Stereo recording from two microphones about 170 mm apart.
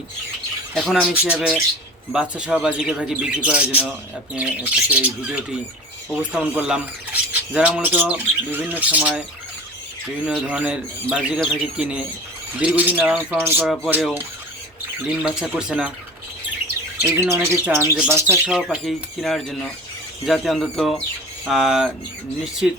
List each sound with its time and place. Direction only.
0.7 s speech: 5° left (ahead or behind)
10.2 s speech: 5° right (ahead or behind)
13.7 s speech: centre (ahead or behind)
15.1 s speech: 5° right (ahead or behind)
17.0 s speech: 15° right (ahead or behind)
18.5 s speech: centre (ahead or behind)